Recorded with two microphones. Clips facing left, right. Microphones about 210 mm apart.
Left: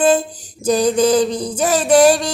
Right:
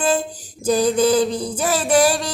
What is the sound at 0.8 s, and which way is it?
Mantra, 90° left.